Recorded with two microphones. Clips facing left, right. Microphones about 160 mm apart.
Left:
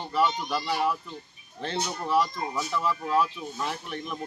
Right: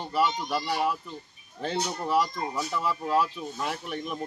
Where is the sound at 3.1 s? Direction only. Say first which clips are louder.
Right 1 dB; 10° right (ahead or behind).